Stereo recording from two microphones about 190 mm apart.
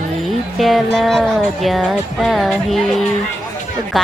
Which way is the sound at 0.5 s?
Centre (ahead or behind).